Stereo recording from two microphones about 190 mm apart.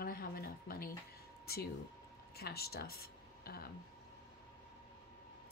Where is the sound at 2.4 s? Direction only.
55° left (ahead or behind).